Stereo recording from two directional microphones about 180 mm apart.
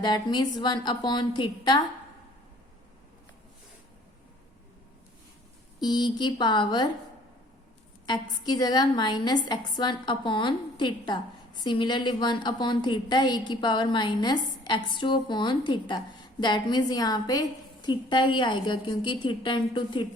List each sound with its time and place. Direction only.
0.0 s a woman's voice: 25° left (ahead or behind)
5.8 s a woman's voice: 25° left (ahead or behind)
8.0 s a woman's voice: 25° left (ahead or behind)